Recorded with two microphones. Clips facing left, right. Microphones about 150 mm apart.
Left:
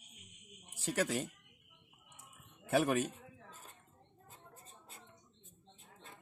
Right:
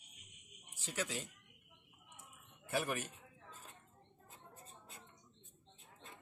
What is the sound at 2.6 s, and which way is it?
Speech, 70° left (ahead or behind).